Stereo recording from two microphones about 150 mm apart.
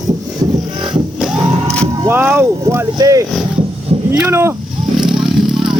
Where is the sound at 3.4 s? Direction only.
35° right (ahead or behind).